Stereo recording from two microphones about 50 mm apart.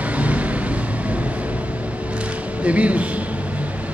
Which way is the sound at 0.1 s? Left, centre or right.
Right.